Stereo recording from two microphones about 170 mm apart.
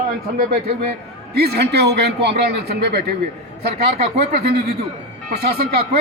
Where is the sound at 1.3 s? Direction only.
70° right (ahead or behind).